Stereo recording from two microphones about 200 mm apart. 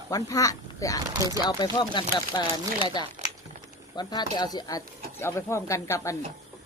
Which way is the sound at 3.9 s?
20° left (ahead or behind).